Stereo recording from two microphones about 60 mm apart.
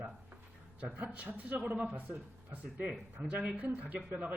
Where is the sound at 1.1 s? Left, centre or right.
Right.